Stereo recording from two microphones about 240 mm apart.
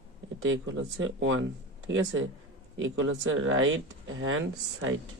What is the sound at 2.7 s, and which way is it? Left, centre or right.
Speech, right.